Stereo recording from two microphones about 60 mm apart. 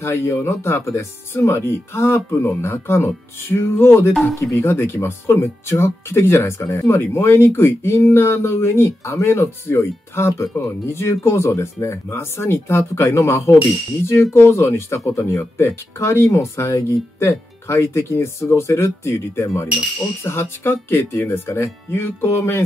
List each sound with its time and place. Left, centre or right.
0.0 s speech: left
20.2 s speech: left